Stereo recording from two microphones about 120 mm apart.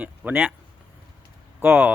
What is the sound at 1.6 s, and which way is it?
Speech, 15° right (ahead or behind).